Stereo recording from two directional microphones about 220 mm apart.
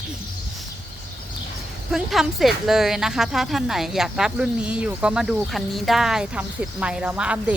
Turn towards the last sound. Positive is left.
turn(degrees=-5)  # may be behind; listen again after turning